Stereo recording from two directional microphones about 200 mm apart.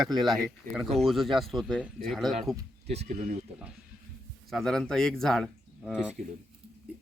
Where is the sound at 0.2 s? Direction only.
Centre (ahead or behind).